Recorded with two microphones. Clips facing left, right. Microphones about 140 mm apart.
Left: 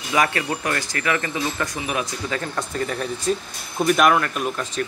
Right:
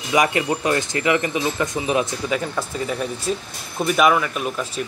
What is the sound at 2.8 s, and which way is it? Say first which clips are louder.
Speech: left 1 dB; 10° right (ahead or behind).